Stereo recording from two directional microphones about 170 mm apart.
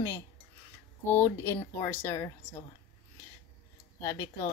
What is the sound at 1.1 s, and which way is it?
Speech, 15° left (ahead or behind).